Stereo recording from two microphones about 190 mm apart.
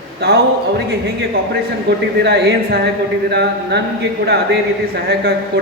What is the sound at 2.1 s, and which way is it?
A man's voice, 60° right (ahead or behind).